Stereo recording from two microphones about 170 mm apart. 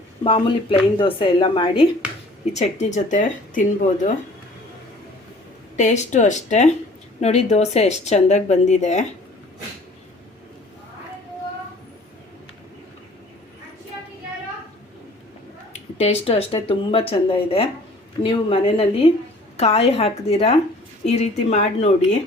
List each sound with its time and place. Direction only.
0.3 s speech: 30° left (ahead or behind)
2.5 s speech: 40° left (ahead or behind)
5.7 s speech: 45° left (ahead or behind)
15.7 s speech: 40° left (ahead or behind)